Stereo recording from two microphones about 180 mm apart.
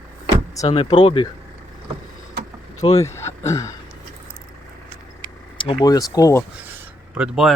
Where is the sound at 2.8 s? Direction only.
20° left (ahead or behind).